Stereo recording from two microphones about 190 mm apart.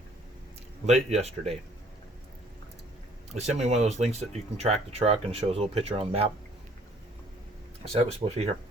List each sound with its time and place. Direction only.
0.9 s speech: 35° right (ahead or behind)
3.3 s speech: 35° right (ahead or behind)
7.9 s speech: 30° right (ahead or behind)